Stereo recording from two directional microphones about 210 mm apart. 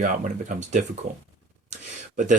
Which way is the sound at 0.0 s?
35° right (ahead or behind).